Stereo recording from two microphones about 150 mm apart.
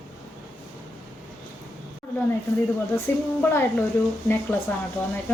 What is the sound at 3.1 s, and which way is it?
Speech, 15° left (ahead or behind).